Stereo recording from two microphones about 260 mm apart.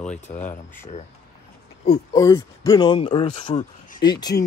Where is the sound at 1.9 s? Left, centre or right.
Centre.